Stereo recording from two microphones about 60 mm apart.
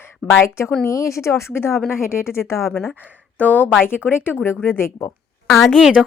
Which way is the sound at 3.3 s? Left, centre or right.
Left.